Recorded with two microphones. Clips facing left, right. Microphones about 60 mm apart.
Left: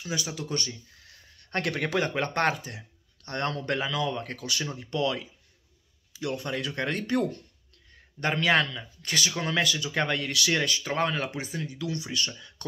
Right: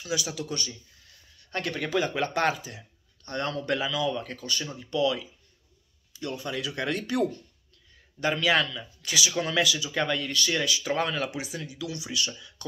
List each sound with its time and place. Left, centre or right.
0.4 s speech: left
1.0 s a sound: left
2.1 s speech: left
4.4 s speech: left
4.9 s speech: left
6.3 s speech: left
10.8 s speech: left